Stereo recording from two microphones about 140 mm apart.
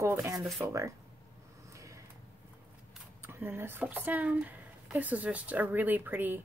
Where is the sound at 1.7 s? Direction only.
20° right (ahead or behind).